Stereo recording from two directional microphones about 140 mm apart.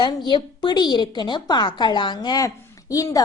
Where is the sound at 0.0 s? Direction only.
35° left (ahead or behind).